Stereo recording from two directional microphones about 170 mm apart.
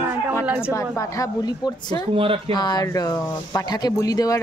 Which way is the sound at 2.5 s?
25° left (ahead or behind).